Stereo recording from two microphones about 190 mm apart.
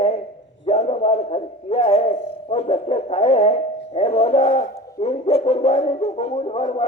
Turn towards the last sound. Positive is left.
turn(degrees=35)  # may be behind; listen again after turning